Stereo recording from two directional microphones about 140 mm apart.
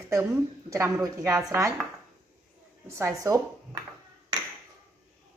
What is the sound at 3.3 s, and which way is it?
Speech, 20° right (ahead or behind).